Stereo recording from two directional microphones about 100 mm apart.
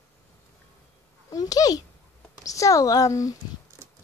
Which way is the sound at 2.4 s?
35° left (ahead or behind).